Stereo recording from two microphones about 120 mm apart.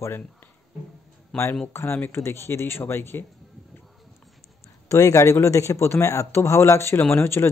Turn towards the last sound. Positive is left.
turn(degrees=20)  # may be behind; listen again after turning